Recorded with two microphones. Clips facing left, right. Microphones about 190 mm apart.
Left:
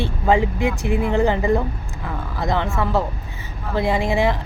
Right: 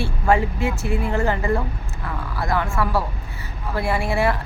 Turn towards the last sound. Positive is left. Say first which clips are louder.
# left 2 dB
turn(degrees=15)  # may be behind; listen again after turning